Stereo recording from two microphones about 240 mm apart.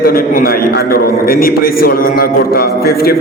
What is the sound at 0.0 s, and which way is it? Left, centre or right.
A man's voice, left.